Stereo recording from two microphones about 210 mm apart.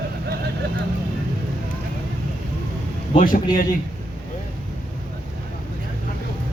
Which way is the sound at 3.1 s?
40° left (ahead or behind).